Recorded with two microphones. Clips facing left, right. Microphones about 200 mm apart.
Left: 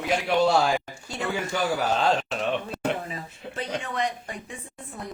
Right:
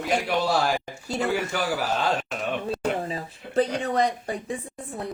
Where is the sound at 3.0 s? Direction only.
35° right (ahead or behind).